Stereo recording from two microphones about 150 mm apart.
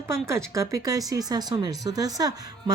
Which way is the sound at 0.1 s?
20° right (ahead or behind).